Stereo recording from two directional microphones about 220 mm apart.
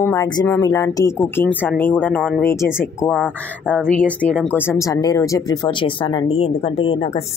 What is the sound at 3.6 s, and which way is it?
Speech, 5° left (ahead or behind).